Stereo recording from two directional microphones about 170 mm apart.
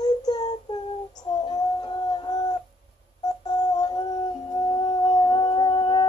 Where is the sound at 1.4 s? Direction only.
25° left (ahead or behind).